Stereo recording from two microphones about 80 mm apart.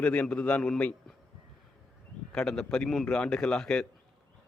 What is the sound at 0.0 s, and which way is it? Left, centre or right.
Speech, centre.